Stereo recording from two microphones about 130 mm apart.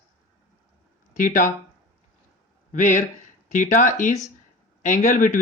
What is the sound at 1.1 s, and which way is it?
Speech, 90° left.